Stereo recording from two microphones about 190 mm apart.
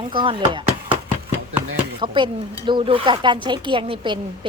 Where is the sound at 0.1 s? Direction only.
25° right (ahead or behind).